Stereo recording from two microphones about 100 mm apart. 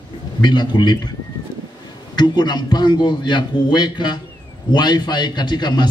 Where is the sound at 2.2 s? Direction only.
45° left (ahead or behind).